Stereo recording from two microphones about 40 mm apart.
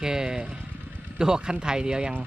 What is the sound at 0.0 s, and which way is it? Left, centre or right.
Speech, centre.